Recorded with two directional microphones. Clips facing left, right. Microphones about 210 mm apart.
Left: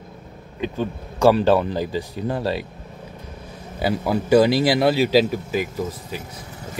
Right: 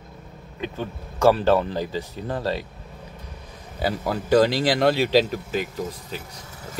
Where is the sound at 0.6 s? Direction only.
15° left (ahead or behind).